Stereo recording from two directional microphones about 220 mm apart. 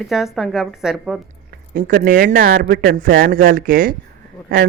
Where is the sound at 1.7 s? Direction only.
40° right (ahead or behind).